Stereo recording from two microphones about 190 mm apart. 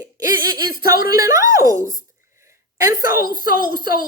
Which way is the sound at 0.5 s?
50° left (ahead or behind).